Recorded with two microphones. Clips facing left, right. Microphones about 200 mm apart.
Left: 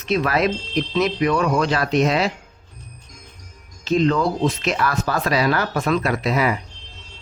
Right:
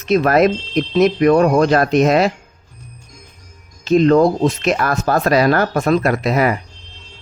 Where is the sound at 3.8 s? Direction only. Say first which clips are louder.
Right 7 dB; 50° right (ahead or behind).